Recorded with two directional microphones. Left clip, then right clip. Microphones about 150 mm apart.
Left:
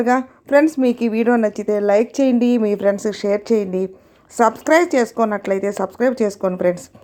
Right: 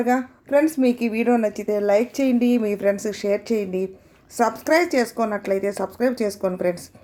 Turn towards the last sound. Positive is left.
turn(degrees=35)  # may be behind; listen again after turning